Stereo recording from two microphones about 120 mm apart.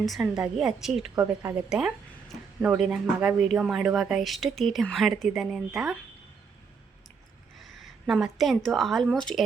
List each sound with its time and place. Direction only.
0.0 s speech: centre (ahead or behind)
1.2 s a woman's voice: 15° right (ahead or behind); by 6.0 s centre (ahead or behind)
7.6 s a woman's voice: centre (ahead or behind)